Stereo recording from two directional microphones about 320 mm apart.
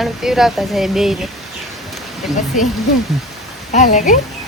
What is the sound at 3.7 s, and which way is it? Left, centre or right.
Speech, left.